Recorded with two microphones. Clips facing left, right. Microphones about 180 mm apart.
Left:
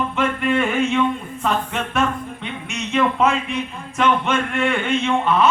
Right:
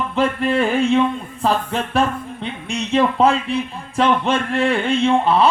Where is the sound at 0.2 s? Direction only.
35° right (ahead or behind).